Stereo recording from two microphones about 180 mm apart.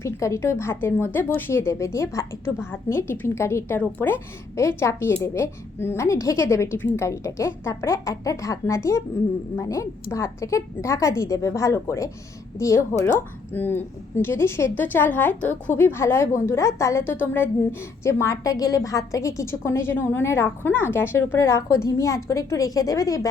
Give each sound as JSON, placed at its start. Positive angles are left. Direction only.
{"t": 0.0, "sound": "a woman's voice", "side_deg": 15}